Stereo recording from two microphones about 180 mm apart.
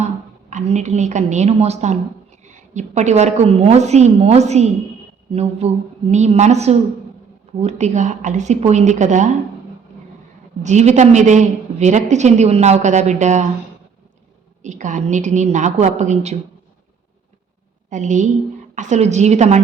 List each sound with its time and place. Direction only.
0.5 s a woman's voice: 40° right (ahead or behind)
10.6 s a woman's voice: 40° right (ahead or behind)
14.6 s a woman's voice: 40° right (ahead or behind)
17.8 s a woman's voice: 45° right (ahead or behind)